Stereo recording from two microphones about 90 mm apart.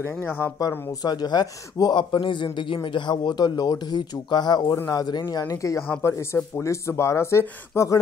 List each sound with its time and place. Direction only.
0.2 s speech: 20° left (ahead or behind)
0.6 s a man's voice: 45° left (ahead or behind)